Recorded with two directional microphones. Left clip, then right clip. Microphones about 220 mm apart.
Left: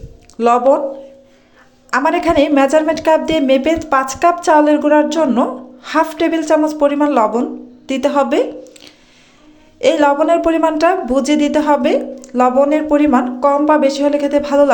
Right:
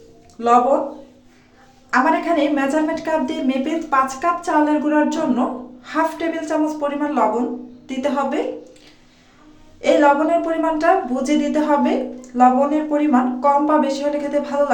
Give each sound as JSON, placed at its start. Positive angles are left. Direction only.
{"t": 0.3, "sound": "a woman's voice", "side_deg": 40}
{"t": 1.9, "sound": "a woman's voice", "side_deg": 45}
{"t": 9.8, "sound": "a woman's voice", "side_deg": 45}